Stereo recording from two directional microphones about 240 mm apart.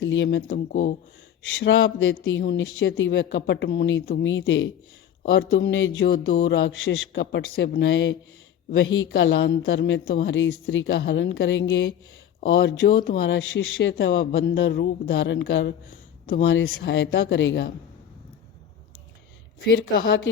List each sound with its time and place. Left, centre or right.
0.0 s speech: left
1.5 s speech: left
19.7 s speech: left